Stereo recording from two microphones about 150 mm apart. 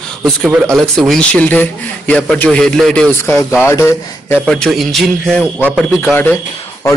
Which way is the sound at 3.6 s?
15° left (ahead or behind).